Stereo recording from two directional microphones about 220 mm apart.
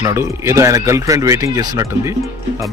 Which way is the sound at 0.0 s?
10° right (ahead or behind).